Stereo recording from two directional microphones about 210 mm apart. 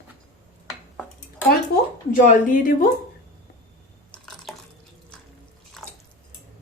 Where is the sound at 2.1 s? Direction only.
35° left (ahead or behind).